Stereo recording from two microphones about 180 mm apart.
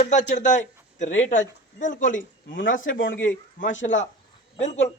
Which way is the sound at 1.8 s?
45° left (ahead or behind).